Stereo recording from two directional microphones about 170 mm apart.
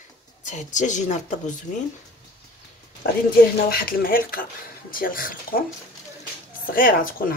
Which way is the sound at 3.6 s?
60° left (ahead or behind).